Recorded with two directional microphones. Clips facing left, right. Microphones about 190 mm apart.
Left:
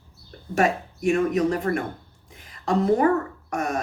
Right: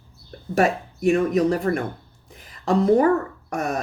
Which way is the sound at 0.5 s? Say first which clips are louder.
Right 2 dB; 35° right (ahead or behind).